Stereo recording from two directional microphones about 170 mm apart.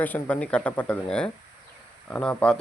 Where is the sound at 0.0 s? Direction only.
10° left (ahead or behind).